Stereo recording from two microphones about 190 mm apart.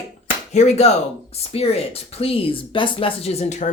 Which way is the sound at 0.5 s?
35° left (ahead or behind).